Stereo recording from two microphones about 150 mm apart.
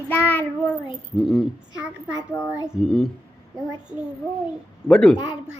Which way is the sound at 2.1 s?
20° left (ahead or behind).